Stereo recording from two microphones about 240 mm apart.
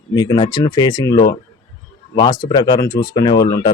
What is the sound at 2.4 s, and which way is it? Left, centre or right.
Speech, centre.